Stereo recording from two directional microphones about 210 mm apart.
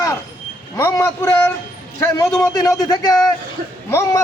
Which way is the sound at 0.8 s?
15° left (ahead or behind).